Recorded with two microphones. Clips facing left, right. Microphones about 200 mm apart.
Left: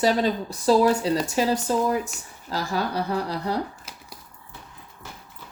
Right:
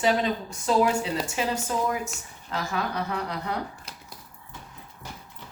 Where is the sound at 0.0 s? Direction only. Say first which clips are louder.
Left 3 dB; 35° left (ahead or behind).